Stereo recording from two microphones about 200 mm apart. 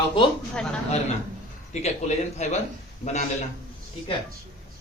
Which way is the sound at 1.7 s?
35° left (ahead or behind).